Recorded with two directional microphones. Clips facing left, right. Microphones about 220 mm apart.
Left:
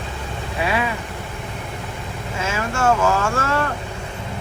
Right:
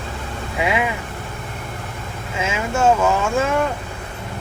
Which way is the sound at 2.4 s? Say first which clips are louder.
Right 3 dB; 15° right (ahead or behind).